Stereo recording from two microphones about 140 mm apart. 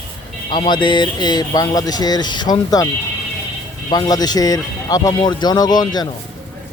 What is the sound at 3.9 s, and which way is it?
Speech, 30° left (ahead or behind).